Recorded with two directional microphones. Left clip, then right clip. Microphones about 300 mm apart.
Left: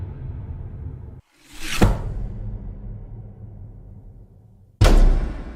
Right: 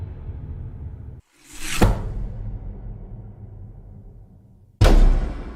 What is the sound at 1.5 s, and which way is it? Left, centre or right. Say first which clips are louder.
Music: even; centre.